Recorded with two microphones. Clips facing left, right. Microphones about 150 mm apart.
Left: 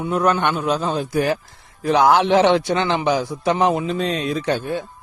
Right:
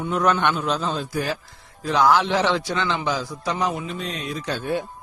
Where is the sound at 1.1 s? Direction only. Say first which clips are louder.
Left 6 dB; 55° left (ahead or behind).